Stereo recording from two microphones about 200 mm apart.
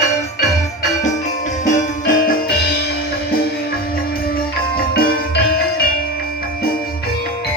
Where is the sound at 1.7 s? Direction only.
40° left (ahead or behind).